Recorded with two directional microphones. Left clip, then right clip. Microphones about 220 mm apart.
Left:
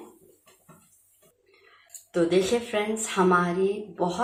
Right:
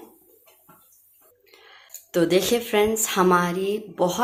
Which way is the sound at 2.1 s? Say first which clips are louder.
Right 3 dB; 45° right (ahead or behind).